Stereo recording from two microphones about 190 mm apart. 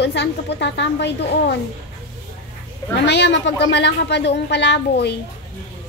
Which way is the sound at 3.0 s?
65° left (ahead or behind).